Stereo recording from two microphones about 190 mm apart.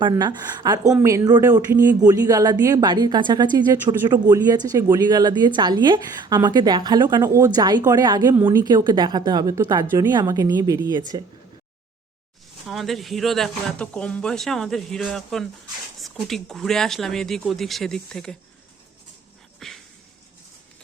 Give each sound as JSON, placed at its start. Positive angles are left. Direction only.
{"t": 0.0, "sound": "a woman's voice", "side_deg": -20}
{"t": 12.6, "sound": "speech", "side_deg": 0}
{"t": 19.5, "sound": "a sound", "side_deg": 0}